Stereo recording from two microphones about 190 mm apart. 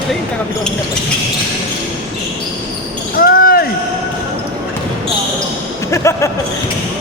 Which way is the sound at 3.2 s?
50° left (ahead or behind).